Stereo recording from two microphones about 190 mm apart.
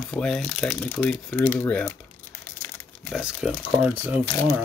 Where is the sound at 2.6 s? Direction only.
15° left (ahead or behind).